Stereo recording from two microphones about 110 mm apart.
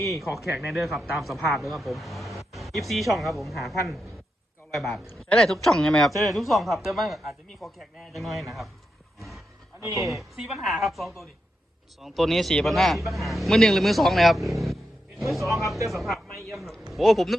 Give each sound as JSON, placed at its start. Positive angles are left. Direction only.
{"t": 0.1, "sound": "a man's voice", "side_deg": 0}
{"t": 9.8, "sound": "a woman's voice", "side_deg": -30}
{"t": 10.1, "sound": "a man's voice", "side_deg": 0}